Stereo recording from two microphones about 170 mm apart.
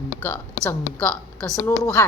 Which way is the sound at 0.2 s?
10° left (ahead or behind).